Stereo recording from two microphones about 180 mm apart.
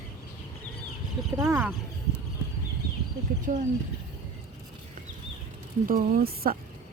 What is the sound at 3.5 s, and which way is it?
Speech, 45° right (ahead or behind).